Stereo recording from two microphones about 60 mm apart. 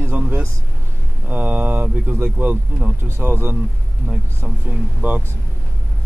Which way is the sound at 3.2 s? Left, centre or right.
Right.